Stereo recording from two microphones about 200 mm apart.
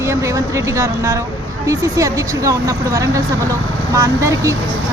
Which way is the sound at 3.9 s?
15° right (ahead or behind).